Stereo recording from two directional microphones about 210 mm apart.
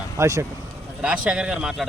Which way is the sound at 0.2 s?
15° right (ahead or behind).